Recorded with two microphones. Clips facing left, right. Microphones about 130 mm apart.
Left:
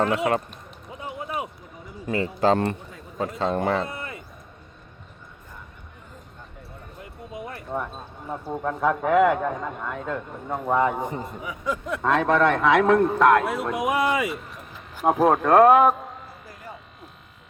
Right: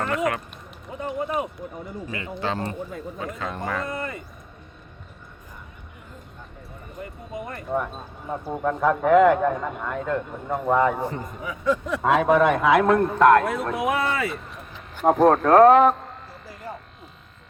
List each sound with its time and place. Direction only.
0.9 s a sound: centre (ahead or behind)
2.1 s speech: 35° left (ahead or behind)
3.8 s speech: 5° left (ahead or behind)
7.0 s speech: 5° left (ahead or behind)
10.9 s a man's voice: 20° left (ahead or behind)
11.6 s a man's voice: 5° left (ahead or behind)
12.0 s speech: 5° right (ahead or behind); by 14.3 s 15° left (ahead or behind)
14.5 s speech: centre (ahead or behind)